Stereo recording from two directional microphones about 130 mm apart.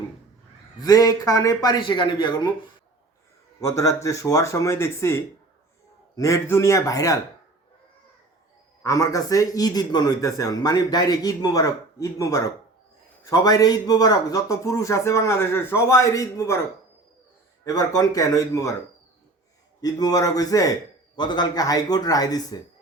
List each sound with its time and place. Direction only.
0.8 s a man's voice: 30° left (ahead or behind)
3.6 s a man's voice: 25° left (ahead or behind)
8.8 s a man's voice: 25° left (ahead or behind)
17.7 s a man's voice: 25° left (ahead or behind)
19.8 s a man's voice: 30° left (ahead or behind)